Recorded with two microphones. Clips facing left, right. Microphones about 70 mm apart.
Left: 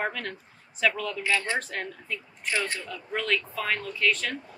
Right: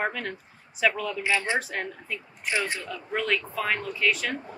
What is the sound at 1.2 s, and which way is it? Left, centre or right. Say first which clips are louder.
Speech: right 1 dB; centre.